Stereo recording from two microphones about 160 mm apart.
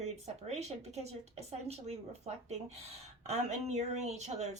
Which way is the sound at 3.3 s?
45° right (ahead or behind).